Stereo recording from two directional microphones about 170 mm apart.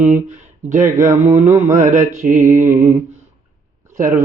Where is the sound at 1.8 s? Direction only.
50° right (ahead or behind).